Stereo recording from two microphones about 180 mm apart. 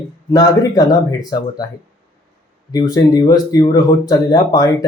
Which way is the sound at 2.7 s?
20° left (ahead or behind).